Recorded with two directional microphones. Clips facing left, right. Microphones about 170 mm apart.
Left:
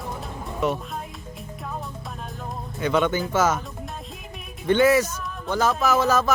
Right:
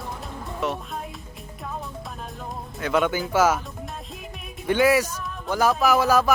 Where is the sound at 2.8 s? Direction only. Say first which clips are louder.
Left 1 dB; 5° right (ahead or behind).